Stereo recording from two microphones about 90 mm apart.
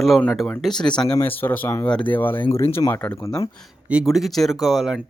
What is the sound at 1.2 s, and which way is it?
Speech, 20° left (ahead or behind).